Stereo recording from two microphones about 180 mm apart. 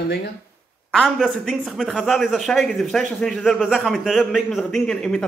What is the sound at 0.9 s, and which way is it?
A man's voice, centre (ahead or behind).